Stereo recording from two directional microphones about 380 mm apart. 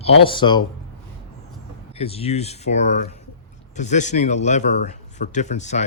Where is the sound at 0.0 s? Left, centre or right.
Centre.